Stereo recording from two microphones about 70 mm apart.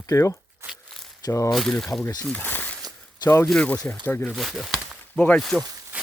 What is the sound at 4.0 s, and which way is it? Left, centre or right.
Speech, left.